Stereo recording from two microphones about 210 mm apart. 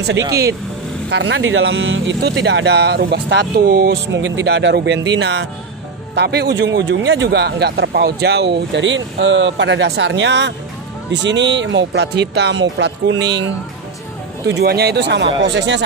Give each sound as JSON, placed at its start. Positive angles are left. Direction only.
{"t": 1.1, "sound": "speech", "side_deg": -60}
{"t": 14.5, "sound": "speech", "side_deg": -50}